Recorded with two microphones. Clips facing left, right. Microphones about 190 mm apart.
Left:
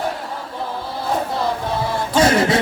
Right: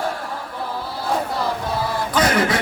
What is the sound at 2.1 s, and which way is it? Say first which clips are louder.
Music: left 4 dB; 25° left (ahead or behind).